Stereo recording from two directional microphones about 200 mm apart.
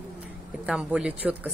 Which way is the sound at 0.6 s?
5° right (ahead or behind).